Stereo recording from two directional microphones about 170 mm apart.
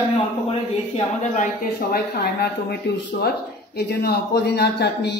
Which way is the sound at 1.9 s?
70° left (ahead or behind).